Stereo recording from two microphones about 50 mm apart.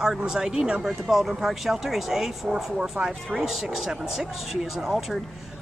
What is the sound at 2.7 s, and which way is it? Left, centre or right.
Speech, centre.